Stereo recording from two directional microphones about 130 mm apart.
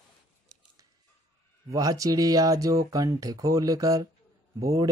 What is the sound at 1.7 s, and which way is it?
Mantra, 25° right (ahead or behind).